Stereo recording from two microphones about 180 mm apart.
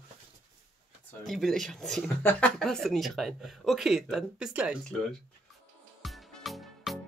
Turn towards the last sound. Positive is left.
turn(degrees=0)  # may be behind; listen again after turning